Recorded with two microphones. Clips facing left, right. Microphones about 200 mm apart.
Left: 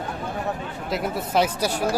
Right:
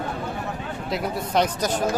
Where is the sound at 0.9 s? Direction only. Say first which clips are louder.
Left 1 dB; 5° left (ahead or behind).